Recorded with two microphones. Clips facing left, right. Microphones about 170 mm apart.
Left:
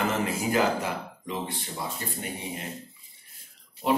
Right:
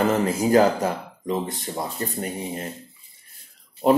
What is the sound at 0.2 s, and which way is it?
Speech, 40° right (ahead or behind).